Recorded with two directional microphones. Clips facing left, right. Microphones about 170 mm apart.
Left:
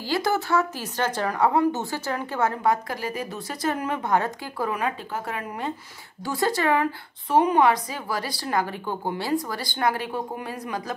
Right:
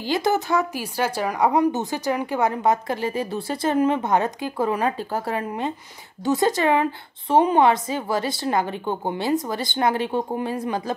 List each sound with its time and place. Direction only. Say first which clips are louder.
0.0 s speech: right 3 dB; 20° right (ahead or behind)